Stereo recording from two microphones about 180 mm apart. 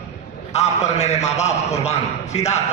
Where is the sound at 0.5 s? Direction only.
35° left (ahead or behind).